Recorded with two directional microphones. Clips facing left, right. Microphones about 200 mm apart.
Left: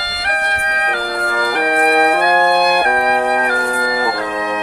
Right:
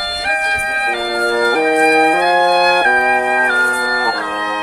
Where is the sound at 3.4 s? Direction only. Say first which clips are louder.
Left 1 dB; 15° left (ahead or behind).